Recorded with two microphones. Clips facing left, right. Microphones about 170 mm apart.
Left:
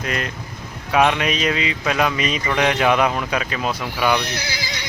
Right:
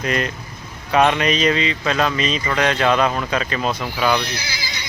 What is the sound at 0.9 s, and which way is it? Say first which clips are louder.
Speech: right 1 dB; 5° left (ahead or behind).